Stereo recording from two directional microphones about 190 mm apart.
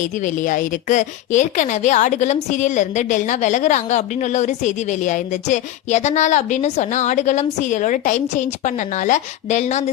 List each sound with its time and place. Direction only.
0.1 s speech: 40° left (ahead or behind)